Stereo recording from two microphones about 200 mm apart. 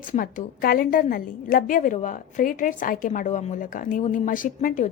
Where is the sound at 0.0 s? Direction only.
40° left (ahead or behind).